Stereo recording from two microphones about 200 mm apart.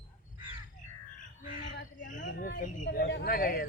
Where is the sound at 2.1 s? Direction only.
40° left (ahead or behind).